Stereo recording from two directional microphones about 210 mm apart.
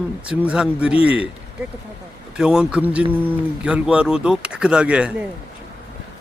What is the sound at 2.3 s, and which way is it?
Speech, 5° right (ahead or behind).